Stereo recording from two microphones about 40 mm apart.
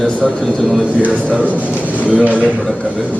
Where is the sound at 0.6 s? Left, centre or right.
Centre.